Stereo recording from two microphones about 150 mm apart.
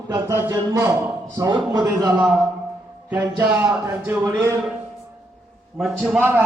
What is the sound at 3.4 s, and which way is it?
Speech, 10° right (ahead or behind).